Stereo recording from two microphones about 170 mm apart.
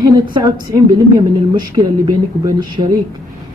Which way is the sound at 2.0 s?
20° right (ahead or behind).